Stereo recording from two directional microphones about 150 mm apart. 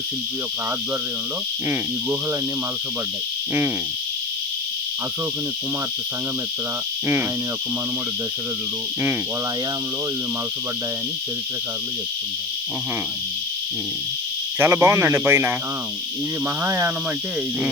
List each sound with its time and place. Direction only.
14.6 s speech: 15° right (ahead or behind)
16.6 s speech: 15° right (ahead or behind)